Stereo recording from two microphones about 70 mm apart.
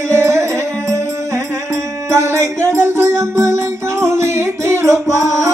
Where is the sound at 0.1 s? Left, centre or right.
Right.